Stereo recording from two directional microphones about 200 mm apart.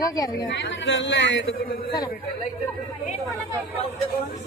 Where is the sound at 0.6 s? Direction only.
65° left (ahead or behind).